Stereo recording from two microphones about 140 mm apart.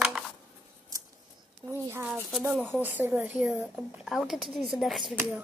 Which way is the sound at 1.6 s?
15° right (ahead or behind).